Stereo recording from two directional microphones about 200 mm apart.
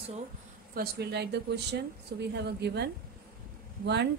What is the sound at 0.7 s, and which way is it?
A woman's voice, 55° right (ahead or behind).